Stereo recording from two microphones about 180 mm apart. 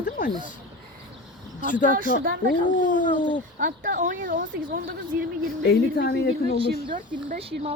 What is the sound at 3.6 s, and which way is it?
Speech, 45° right (ahead or behind).